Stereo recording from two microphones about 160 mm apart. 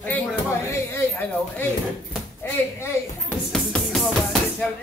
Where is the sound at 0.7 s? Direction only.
15° left (ahead or behind).